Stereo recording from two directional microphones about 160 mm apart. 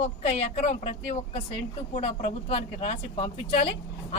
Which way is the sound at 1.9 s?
40° left (ahead or behind).